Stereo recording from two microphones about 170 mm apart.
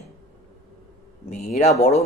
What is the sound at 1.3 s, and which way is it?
Speech, 45° left (ahead or behind).